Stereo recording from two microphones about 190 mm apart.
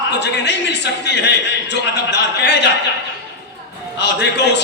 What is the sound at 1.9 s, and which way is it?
Speech, 65° left (ahead or behind).